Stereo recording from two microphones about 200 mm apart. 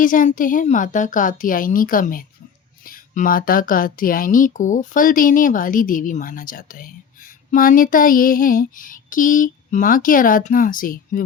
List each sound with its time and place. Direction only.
0.0 s speech: 40° left (ahead or behind)